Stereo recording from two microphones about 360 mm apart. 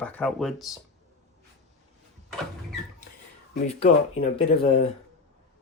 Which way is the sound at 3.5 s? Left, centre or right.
Centre.